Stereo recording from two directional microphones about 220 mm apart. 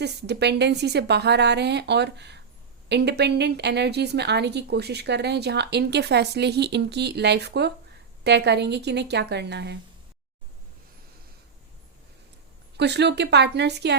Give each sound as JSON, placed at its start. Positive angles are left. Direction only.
{"t": 0.0, "sound": "a woman's voice", "side_deg": -50}
{"t": 12.7, "sound": "a woman's voice", "side_deg": -50}